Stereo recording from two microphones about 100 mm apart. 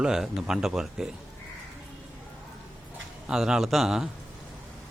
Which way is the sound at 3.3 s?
5° right (ahead or behind).